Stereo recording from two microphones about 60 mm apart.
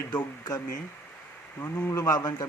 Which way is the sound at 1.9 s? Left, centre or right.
Left.